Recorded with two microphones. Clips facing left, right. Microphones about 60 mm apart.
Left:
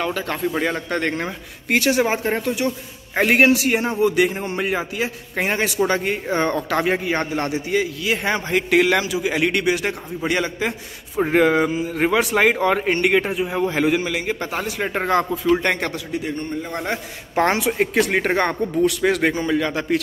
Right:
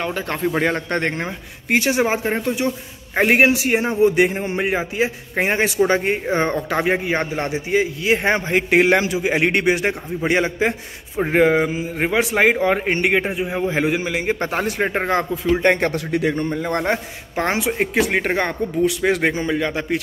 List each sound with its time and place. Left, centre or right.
0.0 s speech: right
1.2 s a man's voice: centre
11.1 s a man's voice: centre
14.2 s speech: right
14.9 s speech: right
16.1 s a man's voice: right
17.5 s a man's voice: centre
18.9 s a man's voice: centre